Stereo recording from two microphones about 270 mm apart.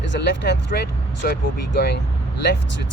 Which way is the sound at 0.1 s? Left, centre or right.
Left.